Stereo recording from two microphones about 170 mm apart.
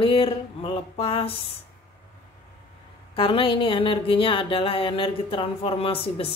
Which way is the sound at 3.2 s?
30° left (ahead or behind).